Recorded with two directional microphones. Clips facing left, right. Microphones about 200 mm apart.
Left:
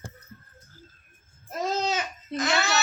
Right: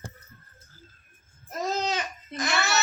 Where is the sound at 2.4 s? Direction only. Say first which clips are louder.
Left 2 dB; 20° left (ahead or behind).